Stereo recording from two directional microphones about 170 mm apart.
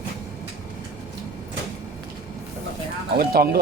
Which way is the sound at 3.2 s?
65° right (ahead or behind).